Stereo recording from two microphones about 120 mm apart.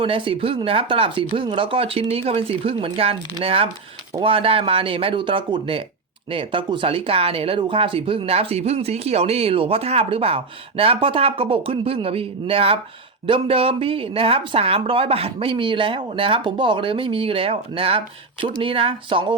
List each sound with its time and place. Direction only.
0.0 s speech: 45° right (ahead or behind)